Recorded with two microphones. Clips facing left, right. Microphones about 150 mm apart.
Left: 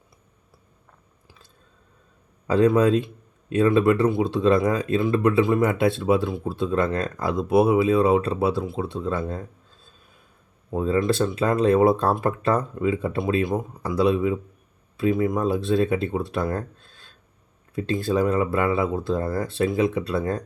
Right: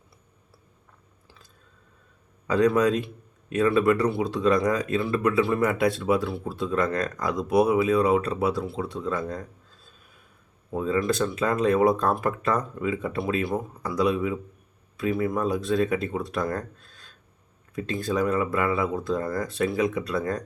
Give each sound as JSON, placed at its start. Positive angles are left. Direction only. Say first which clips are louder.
{"t": 2.5, "sound": "speech", "louder": "left 3 dB", "side_deg": 30}
{"t": 5.6, "sound": "speech", "louder": "left 2 dB", "side_deg": 25}
{"t": 10.7, "sound": "speech", "louder": "left 3 dB", "side_deg": 30}